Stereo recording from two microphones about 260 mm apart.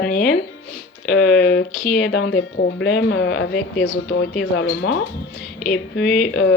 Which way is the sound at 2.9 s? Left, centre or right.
Left.